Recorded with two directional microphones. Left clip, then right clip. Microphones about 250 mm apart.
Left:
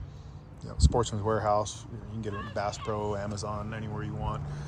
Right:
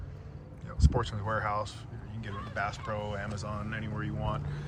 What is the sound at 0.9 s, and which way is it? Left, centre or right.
Speech, left.